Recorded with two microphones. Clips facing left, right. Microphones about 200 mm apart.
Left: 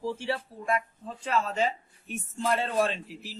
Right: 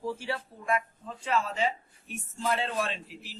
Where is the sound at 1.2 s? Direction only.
40° left (ahead or behind).